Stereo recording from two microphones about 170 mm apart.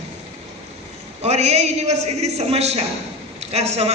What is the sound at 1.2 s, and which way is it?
A woman's voice, 40° right (ahead or behind).